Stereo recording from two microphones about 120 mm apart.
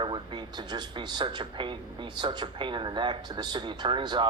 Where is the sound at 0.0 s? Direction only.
40° right (ahead or behind).